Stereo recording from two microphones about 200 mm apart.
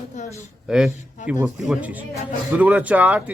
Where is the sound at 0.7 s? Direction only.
5° right (ahead or behind).